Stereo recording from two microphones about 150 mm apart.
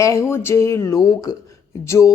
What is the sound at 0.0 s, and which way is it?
Speech, 20° left (ahead or behind).